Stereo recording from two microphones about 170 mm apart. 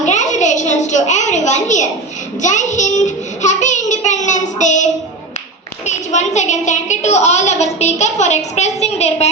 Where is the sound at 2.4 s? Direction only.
45° left (ahead or behind).